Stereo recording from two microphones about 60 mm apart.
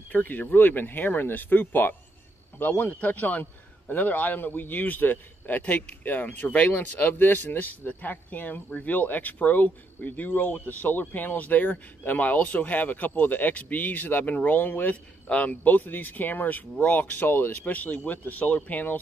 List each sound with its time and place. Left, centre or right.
0.1 s speech: left